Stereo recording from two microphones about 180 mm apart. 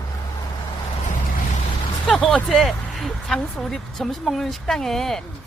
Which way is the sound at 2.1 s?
Centre (ahead or behind).